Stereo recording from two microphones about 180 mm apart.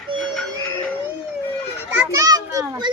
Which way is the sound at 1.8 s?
10° right (ahead or behind).